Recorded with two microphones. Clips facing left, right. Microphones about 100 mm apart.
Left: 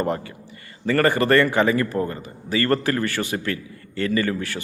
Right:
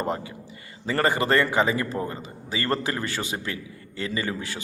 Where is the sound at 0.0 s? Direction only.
15° right (ahead or behind).